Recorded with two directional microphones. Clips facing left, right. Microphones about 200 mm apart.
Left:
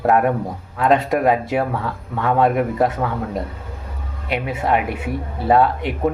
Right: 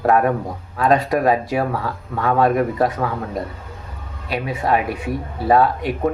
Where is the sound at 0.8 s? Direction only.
25° left (ahead or behind).